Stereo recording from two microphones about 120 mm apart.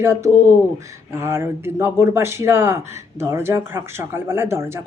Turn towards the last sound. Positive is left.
turn(degrees=-20)  # may be behind; listen again after turning